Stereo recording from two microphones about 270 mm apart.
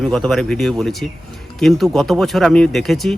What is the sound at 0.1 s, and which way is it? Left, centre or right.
Speech, centre.